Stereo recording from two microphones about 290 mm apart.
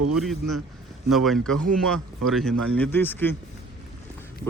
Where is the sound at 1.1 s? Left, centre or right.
Centre.